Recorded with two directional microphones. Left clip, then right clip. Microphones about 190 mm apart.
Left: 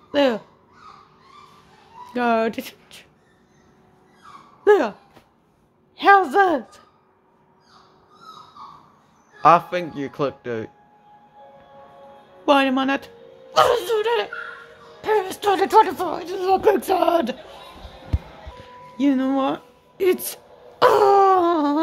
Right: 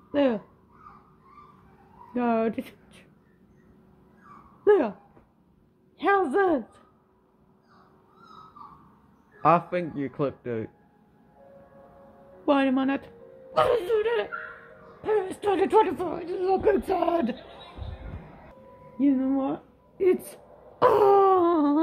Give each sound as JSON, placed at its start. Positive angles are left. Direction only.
{"t": 0.1, "sound": "speech", "side_deg": 10}
{"t": 2.1, "sound": "speech", "side_deg": 5}
{"t": 4.6, "sound": "speech", "side_deg": 5}
{"t": 5.9, "sound": "speech", "side_deg": 5}
{"t": 9.4, "sound": "speech", "side_deg": 5}
{"t": 12.4, "sound": "a woman's voice", "side_deg": 10}
{"t": 18.9, "sound": "speech", "side_deg": 15}
{"t": 20.8, "sound": "a sound", "side_deg": 0}